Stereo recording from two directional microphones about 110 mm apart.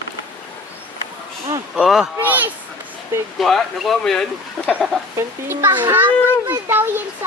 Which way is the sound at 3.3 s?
Centre (ahead or behind).